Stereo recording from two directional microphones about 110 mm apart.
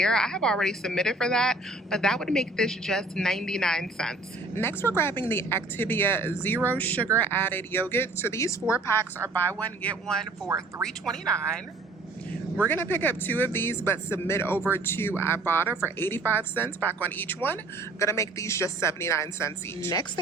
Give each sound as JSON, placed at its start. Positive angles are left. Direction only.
{"t": 0.0, "sound": "a woman's voice", "side_deg": 5}
{"t": 4.5, "sound": "a woman's voice", "side_deg": 20}
{"t": 12.6, "sound": "a woman's voice", "side_deg": 15}